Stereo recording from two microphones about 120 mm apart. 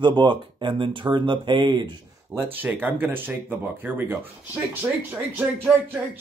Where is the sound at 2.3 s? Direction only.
15° right (ahead or behind).